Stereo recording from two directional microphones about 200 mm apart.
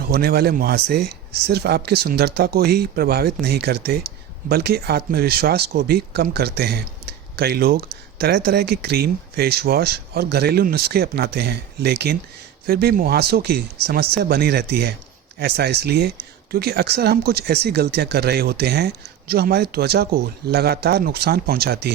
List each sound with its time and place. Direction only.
0.0 s speech: 50° right (ahead or behind)